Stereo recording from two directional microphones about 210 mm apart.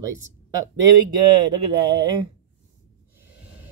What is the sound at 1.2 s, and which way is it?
Speech, 20° right (ahead or behind).